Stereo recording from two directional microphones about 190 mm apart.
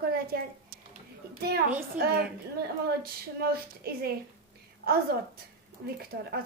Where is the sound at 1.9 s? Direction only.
55° right (ahead or behind).